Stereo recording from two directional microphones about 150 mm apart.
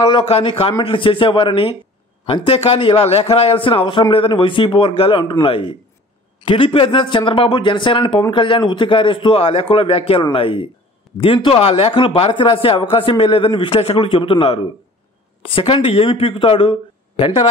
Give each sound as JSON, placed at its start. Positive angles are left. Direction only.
{"t": 0.0, "sound": "speech", "side_deg": 35}